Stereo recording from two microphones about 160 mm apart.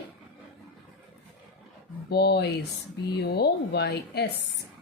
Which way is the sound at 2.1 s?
90° left.